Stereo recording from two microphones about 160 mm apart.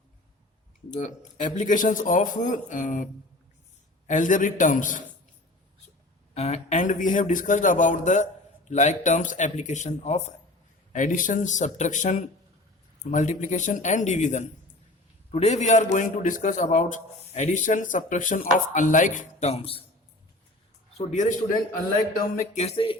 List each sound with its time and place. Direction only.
0.9 s a man's voice: 50° left (ahead or behind)
6.3 s a man's voice: 40° left (ahead or behind)
10.9 s a man's voice: 55° left (ahead or behind); by 19.8 s 40° left (ahead or behind)
21.1 s a man's voice: 50° left (ahead or behind)
22.6 s speech: 35° left (ahead or behind)